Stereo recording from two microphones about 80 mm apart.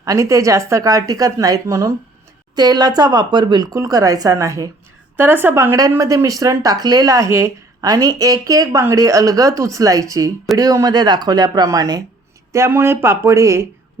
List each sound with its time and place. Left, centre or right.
0.0 s speech: right
2.6 s speech: right
5.1 s a woman's voice: right
6.0 s speech: right
7.8 s speech: right
10.9 s speech: right
12.5 s speech: right